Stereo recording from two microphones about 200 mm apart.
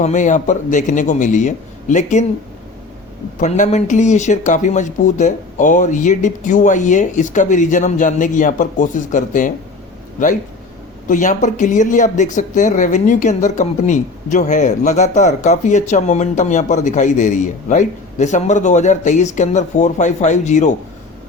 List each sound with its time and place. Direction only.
0.0 s speech: 40° left (ahead or behind)
3.4 s speech: 35° left (ahead or behind)
11.1 s speech: 40° left (ahead or behind)